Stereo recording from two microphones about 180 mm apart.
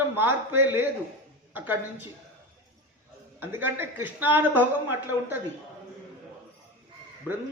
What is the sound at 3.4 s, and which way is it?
A woman's voice, 10° right (ahead or behind).